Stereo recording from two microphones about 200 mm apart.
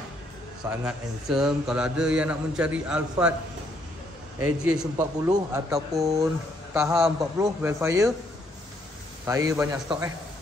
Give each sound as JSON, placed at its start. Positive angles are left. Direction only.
{"t": 0.7, "sound": "a man's voice", "side_deg": -5}
{"t": 4.6, "sound": "a man's voice", "side_deg": -10}
{"t": 9.2, "sound": "a man's voice", "side_deg": -15}